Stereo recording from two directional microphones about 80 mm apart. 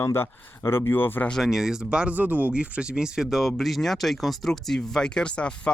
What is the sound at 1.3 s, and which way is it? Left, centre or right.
Speech, centre.